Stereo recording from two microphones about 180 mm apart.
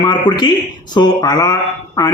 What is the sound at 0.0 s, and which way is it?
A man's voice, 25° left (ahead or behind).